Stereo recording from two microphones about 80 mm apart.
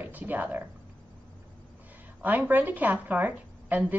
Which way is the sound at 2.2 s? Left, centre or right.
Right.